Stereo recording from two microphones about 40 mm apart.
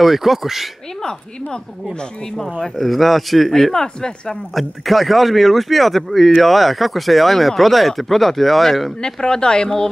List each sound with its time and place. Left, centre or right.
0.0 s speech: centre
2.7 s speech: centre
4.6 s speech: centre
9.0 s speech: centre